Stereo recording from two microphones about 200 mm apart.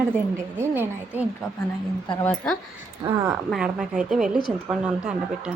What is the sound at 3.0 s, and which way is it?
Speech, 20° right (ahead or behind).